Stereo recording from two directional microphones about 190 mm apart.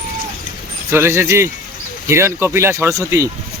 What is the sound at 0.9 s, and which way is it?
Speech, 15° right (ahead or behind).